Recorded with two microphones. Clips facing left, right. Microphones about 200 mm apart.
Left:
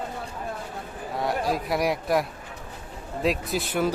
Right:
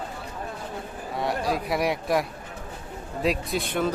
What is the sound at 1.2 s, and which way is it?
A man's voice, centre (ahead or behind).